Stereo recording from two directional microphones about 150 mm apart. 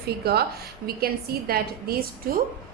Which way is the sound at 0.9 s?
90° right.